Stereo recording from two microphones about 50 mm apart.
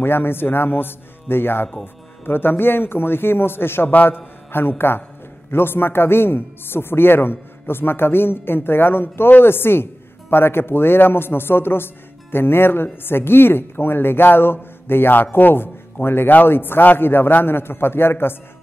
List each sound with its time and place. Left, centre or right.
0.0 s a man's voice: left